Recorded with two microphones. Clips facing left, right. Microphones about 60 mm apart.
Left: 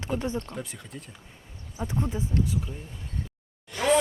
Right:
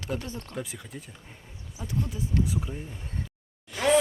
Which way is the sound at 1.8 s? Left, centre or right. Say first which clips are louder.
Left 3 dB; left.